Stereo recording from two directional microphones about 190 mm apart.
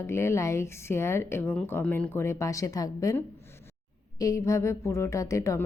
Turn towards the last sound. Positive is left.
turn(degrees=15)  # may be behind; listen again after turning